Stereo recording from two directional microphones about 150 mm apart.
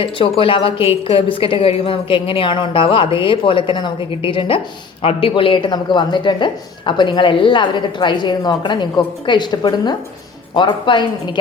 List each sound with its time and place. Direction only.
0.0 s speech: 35° left (ahead or behind)